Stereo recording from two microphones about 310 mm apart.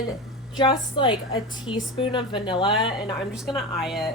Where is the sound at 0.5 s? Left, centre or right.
Centre.